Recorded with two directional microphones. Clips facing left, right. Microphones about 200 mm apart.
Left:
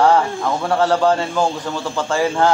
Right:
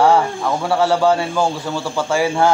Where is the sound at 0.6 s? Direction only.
10° right (ahead or behind).